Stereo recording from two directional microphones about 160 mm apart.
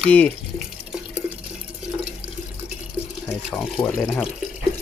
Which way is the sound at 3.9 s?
5° left (ahead or behind).